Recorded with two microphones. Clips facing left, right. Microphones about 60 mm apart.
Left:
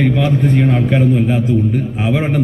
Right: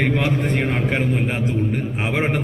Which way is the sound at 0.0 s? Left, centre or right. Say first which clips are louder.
Left 5 dB; right.